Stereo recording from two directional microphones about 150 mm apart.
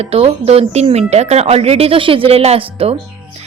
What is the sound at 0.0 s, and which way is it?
A woman's voice, 40° right (ahead or behind).